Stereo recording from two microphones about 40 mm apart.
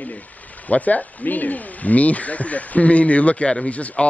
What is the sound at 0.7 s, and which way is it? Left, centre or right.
Speech, left.